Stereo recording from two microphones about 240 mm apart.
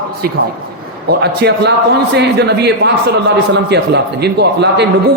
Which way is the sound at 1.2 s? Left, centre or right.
Right.